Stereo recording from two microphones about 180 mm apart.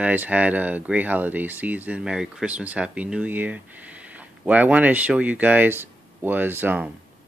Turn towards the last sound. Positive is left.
turn(degrees=-10)  # may be behind; listen again after turning